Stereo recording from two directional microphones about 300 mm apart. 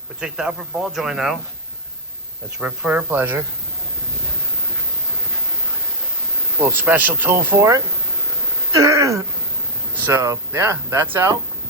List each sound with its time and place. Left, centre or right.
0.2 s speech: centre
2.6 s speech: centre
6.7 s speech: centre